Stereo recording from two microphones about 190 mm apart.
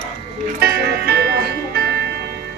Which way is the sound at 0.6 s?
55° right (ahead or behind).